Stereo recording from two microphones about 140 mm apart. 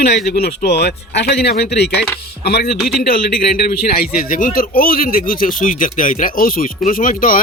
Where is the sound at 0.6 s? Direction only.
90° left.